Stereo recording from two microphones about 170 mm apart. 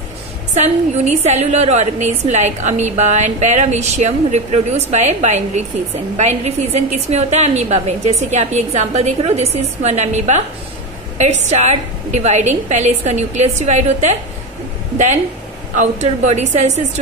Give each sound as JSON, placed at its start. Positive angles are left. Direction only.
{"t": 0.6, "sound": "a woman's voice", "side_deg": -40}
{"t": 15.7, "sound": "a woman's voice", "side_deg": -45}